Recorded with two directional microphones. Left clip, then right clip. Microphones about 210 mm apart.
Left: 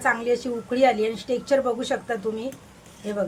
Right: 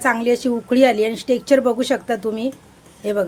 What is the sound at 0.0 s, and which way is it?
Speech, 50° right (ahead or behind).